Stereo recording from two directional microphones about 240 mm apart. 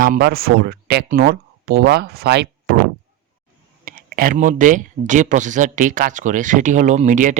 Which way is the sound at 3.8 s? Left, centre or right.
Right.